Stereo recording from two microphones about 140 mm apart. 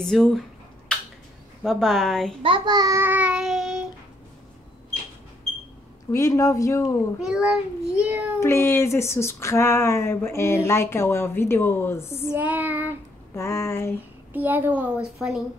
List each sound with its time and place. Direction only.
0.0 s a woman's voice: 5° left (ahead or behind)
1.6 s a woman's voice: 5° left (ahead or behind)
2.4 s a child's voice: 35° right (ahead or behind)
3.0 s child singing: 10° right (ahead or behind)
6.1 s speech: 25° left (ahead or behind)
7.2 s a woman's voice: 5° right (ahead or behind)
8.4 s speech: 20° left (ahead or behind)
12.3 s a child's voice: 10° right (ahead or behind)
13.3 s speech: 20° left (ahead or behind)
14.3 s a child's voice: 15° right (ahead or behind)